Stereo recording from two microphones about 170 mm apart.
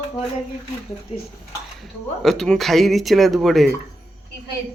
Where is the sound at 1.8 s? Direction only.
Centre (ahead or behind).